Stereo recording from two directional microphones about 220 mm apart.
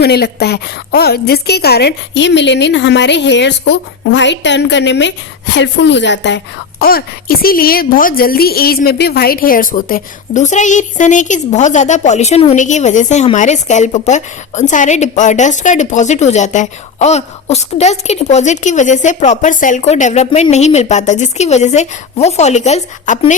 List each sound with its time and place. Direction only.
0.0 s a woman's voice: 45° left (ahead or behind); by 23.3 s 30° left (ahead or behind)